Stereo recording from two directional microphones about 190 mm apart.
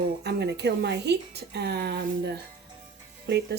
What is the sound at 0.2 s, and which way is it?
Speech, 65° right (ahead or behind).